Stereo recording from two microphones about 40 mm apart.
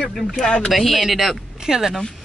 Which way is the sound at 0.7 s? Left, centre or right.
Centre.